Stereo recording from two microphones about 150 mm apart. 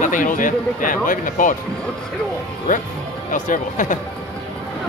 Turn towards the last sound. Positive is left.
turn(degrees=60)  # may be behind; listen again after turning